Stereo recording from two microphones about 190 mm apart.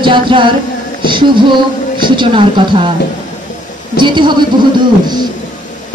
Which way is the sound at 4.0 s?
25° right (ahead or behind).